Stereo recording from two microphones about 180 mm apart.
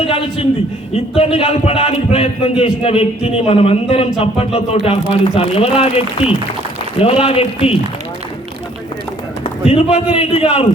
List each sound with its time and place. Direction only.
0.0 s a man's voice: 30° left (ahead or behind)
9.4 s a man's voice: 35° left (ahead or behind)